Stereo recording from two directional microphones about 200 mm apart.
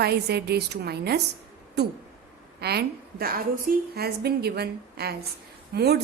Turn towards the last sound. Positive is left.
turn(degrees=-55)  # may be behind; listen again after turning